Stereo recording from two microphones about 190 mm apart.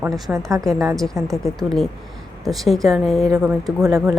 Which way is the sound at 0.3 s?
15° right (ahead or behind).